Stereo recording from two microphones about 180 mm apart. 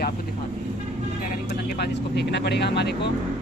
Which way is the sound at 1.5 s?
60° left (ahead or behind).